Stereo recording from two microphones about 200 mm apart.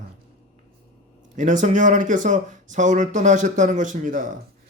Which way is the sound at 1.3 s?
40° right (ahead or behind).